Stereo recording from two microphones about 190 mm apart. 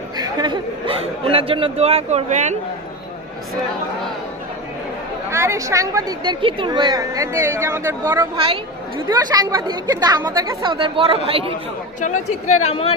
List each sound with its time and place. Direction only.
0.2 s speech: 25° right (ahead or behind); by 2.6 s 40° right (ahead or behind)
5.3 s a woman's voice: 15° right (ahead or behind)
11.9 s speech: 40° left (ahead or behind)